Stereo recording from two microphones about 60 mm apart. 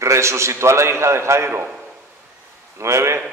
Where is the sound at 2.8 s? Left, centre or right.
Right.